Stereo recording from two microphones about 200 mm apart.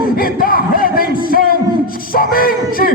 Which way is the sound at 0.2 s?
45° left (ahead or behind).